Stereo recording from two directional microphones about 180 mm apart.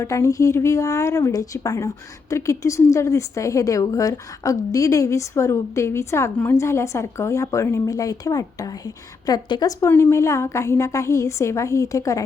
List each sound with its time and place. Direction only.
0.0 s a woman's voice: 15° left (ahead or behind)